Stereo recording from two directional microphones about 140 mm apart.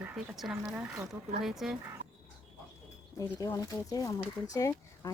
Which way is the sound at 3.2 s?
25° left (ahead or behind).